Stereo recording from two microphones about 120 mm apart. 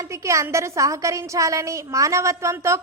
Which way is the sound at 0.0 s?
25° right (ahead or behind).